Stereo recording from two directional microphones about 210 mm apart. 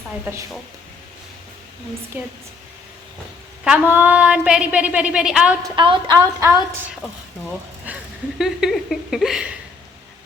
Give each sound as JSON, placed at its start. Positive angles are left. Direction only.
{"t": 2.1, "sound": "speech", "side_deg": -10}
{"t": 3.6, "sound": "a woman's voice", "side_deg": -5}
{"t": 5.6, "sound": "speech", "side_deg": -20}
{"t": 7.9, "sound": "a sound", "side_deg": -5}
{"t": 8.4, "sound": "a woman's voice", "side_deg": 0}